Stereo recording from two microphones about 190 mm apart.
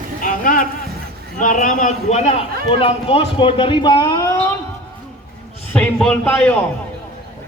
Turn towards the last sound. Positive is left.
turn(degrees=10)  # may be behind; listen again after turning